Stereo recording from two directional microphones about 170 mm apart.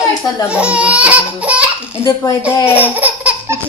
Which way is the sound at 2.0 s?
20° left (ahead or behind).